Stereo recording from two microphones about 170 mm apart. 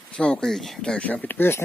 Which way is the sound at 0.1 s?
5° left (ahead or behind).